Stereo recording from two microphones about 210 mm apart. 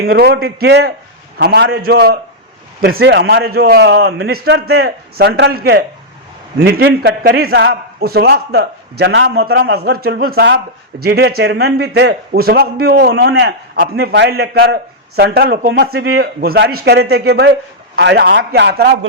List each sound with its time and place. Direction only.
0.0 s a man's voice: 50° right (ahead or behind)